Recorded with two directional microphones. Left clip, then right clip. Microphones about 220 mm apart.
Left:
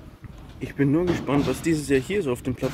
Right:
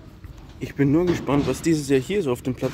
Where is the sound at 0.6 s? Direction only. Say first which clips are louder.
Right 2 dB; 20° right (ahead or behind).